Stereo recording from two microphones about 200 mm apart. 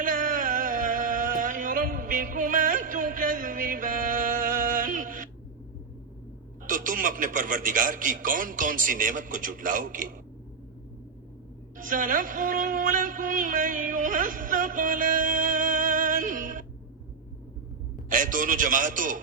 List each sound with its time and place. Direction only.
0.0 s a sound: 40° right (ahead or behind)
6.7 s a man's voice: 40° right (ahead or behind)
11.8 s speech: 40° right (ahead or behind)
18.1 s a man's voice: 40° right (ahead or behind)